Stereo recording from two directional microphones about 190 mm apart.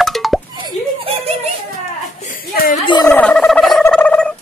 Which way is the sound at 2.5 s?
50° left (ahead or behind).